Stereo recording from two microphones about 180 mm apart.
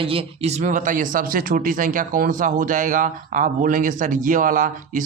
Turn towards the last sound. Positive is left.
turn(degrees=-50)  # may be behind; listen again after turning